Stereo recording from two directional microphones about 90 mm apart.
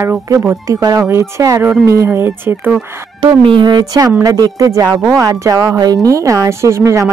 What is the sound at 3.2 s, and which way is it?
Speech, 70° right (ahead or behind).